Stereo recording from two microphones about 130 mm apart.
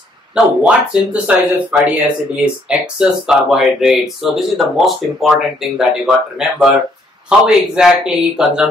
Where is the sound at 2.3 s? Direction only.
5° right (ahead or behind).